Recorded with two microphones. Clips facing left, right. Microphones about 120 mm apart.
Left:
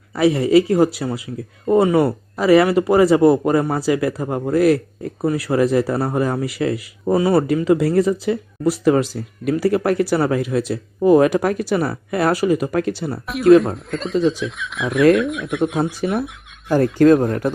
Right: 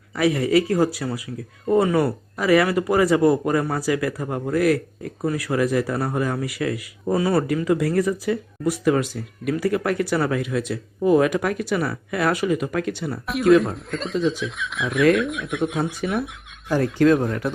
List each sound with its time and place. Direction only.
0.2 s speech: 25° left (ahead or behind)
13.2 s speech: centre (ahead or behind)
16.1 s a sound: centre (ahead or behind)
16.7 s speech: 45° left (ahead or behind)